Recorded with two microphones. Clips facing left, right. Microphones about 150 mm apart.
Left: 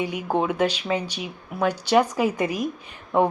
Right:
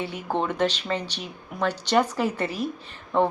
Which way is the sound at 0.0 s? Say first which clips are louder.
Left 3 dB; 15° left (ahead or behind).